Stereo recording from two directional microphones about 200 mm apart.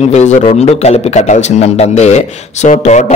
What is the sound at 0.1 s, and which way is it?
A man's voice, 35° left (ahead or behind).